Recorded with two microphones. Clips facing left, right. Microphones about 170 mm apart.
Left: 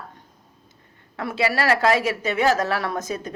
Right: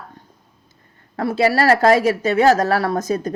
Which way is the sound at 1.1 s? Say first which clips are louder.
Right 6 dB; 40° right (ahead or behind).